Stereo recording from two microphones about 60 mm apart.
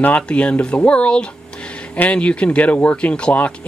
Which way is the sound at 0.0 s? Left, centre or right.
Left.